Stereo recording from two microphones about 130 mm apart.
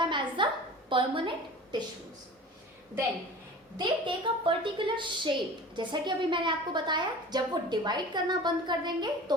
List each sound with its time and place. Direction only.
0.0 s a sound: 40° right (ahead or behind)
0.9 s a woman's voice: 40° right (ahead or behind)
3.8 s a woman's voice: 40° right (ahead or behind)